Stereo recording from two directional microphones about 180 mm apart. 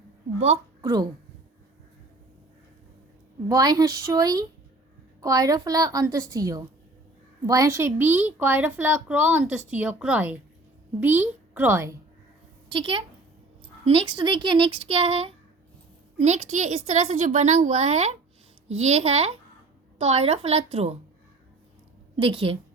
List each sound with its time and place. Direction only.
0.3 s a woman's voice: 35° right (ahead or behind)
0.8 s speech: 20° right (ahead or behind)
3.5 s a woman's voice: 20° right (ahead or behind)
12.7 s a woman's voice: 30° right (ahead or behind)
22.1 s a woman's voice: 30° right (ahead or behind)